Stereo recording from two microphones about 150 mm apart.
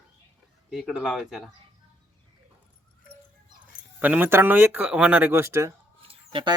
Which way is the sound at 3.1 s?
70° left (ahead or behind).